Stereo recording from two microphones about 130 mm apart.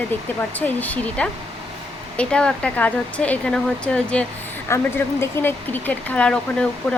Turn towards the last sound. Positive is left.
turn(degrees=10)  # may be behind; listen again after turning